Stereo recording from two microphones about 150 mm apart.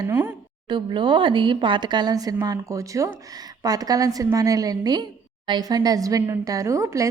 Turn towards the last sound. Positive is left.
turn(degrees=-20)  # may be behind; listen again after turning